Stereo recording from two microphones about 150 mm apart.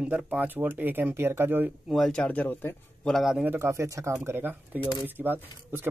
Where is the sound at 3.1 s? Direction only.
5° right (ahead or behind).